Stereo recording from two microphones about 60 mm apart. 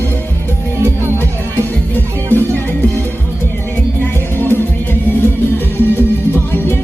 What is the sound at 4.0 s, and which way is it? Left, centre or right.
Music, left.